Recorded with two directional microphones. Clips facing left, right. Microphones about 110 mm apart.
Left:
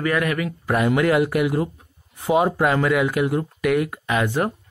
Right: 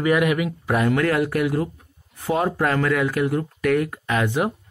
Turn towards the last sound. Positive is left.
turn(degrees=0)  # may be behind; listen again after turning